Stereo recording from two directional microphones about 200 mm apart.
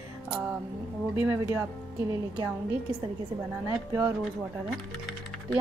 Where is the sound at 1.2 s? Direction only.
10° right (ahead or behind).